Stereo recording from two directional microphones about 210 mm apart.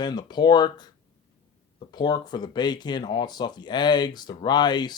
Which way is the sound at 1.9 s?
20° left (ahead or behind).